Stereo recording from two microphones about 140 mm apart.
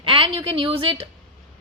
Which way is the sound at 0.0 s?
40° right (ahead or behind).